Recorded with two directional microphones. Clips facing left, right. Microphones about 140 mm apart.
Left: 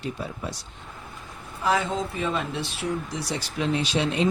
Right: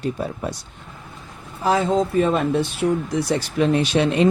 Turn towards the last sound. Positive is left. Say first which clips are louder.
# right 6 dB
turn(degrees=-60)  # may be behind; listen again after turning